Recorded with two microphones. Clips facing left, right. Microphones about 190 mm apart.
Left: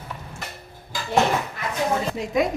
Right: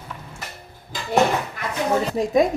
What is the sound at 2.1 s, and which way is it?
Speech, 35° right (ahead or behind).